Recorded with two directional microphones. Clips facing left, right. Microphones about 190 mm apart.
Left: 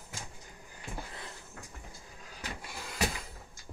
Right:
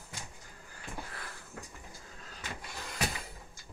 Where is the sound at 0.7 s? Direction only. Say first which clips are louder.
Left 1 dB; 20° left (ahead or behind).